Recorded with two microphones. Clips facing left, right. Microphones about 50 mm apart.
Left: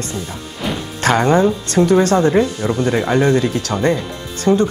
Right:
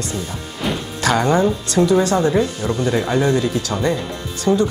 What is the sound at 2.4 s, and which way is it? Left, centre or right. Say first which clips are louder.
Speech: left 2 dB; centre.